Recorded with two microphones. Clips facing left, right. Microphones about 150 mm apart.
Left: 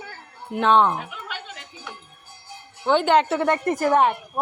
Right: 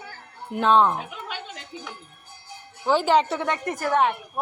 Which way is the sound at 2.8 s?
Centre (ahead or behind).